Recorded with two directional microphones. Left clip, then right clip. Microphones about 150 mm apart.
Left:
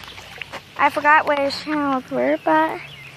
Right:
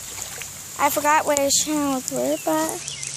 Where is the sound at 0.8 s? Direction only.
20° right (ahead or behind).